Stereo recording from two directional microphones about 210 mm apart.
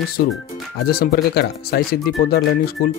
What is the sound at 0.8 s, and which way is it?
Speech, 45° left (ahead or behind).